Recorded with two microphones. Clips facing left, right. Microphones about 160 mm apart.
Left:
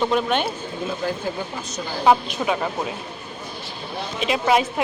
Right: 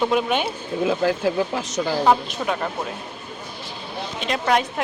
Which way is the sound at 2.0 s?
5° left (ahead or behind).